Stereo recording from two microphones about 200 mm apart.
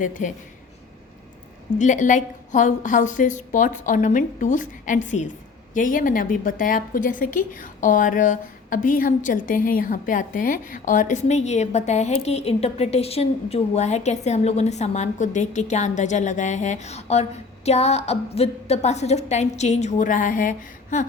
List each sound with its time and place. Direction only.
0.0 s a woman's voice: 40° left (ahead or behind)
1.8 s a woman's voice: 40° left (ahead or behind)